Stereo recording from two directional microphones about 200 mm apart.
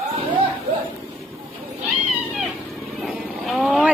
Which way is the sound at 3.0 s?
Centre (ahead or behind).